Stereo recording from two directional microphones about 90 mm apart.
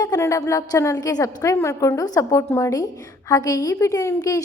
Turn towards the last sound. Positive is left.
turn(degrees=40)  # may be behind; listen again after turning